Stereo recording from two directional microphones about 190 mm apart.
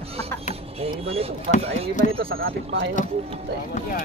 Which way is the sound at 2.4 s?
70° right (ahead or behind).